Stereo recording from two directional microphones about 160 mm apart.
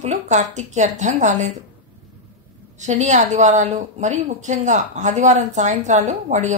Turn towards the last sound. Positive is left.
turn(degrees=-45)  # may be behind; listen again after turning